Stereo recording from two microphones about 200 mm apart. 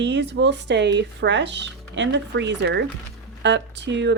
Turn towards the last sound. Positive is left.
turn(degrees=-60)  # may be behind; listen again after turning